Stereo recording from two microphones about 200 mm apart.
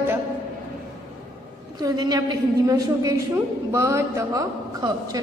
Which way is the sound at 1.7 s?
20° right (ahead or behind).